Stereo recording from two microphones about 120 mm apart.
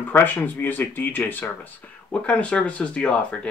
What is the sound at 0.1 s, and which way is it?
Speech, 15° left (ahead or behind).